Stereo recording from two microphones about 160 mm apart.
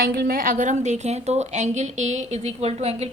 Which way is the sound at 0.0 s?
85° right.